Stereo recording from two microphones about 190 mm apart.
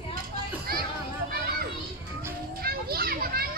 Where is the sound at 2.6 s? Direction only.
55° right (ahead or behind).